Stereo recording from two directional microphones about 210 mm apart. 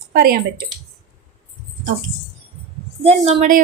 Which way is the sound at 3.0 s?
30° right (ahead or behind).